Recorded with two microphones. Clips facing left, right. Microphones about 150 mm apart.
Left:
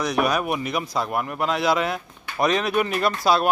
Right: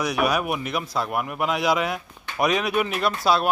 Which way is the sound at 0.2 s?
5° right (ahead or behind).